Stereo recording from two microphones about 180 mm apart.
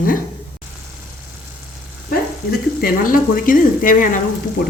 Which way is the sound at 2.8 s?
50° left (ahead or behind).